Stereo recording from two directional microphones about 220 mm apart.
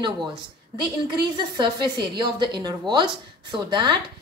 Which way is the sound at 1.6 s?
20° right (ahead or behind).